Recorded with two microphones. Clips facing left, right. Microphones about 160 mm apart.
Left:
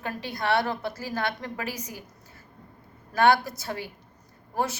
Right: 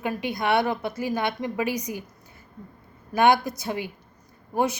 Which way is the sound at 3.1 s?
15° right (ahead or behind).